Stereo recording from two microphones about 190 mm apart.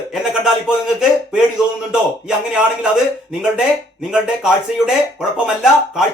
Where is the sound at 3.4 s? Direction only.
5° right (ahead or behind).